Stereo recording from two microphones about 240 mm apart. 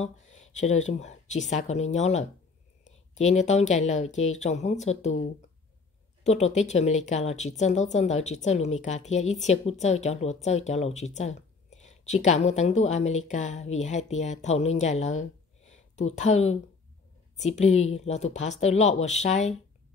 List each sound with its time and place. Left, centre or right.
0.0 s speech: left
6.2 s speech: left